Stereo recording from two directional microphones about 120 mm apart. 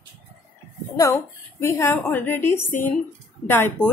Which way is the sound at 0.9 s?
25° left (ahead or behind).